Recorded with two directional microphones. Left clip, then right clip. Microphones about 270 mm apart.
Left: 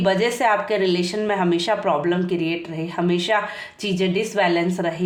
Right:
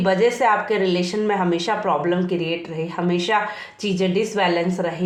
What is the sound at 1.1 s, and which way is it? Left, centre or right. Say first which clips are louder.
Speech: right 1 dB; left.